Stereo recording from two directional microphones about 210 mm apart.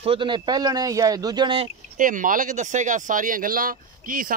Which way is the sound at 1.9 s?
40° right (ahead or behind).